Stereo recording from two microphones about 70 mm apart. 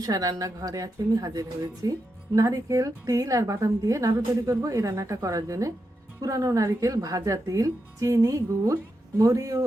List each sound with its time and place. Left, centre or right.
0.0 s speech: right